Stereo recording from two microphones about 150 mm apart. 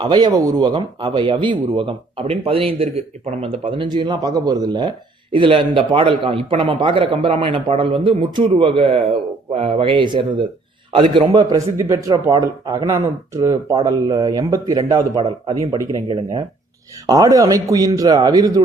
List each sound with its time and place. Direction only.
0.0 s a man's voice: 30° right (ahead or behind)